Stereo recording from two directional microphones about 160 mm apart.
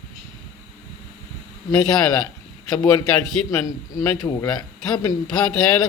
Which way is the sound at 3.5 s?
20° left (ahead or behind).